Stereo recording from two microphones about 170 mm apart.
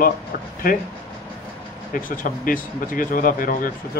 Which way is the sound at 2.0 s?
55° left (ahead or behind).